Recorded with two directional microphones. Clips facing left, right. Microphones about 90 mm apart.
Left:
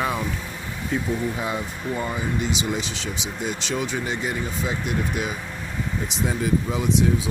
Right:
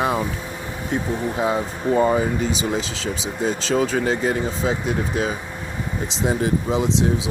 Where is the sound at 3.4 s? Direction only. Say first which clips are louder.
Right 7 dB; 35° right (ahead or behind).